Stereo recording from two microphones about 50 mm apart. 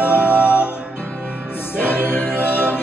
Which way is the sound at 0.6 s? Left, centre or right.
Right.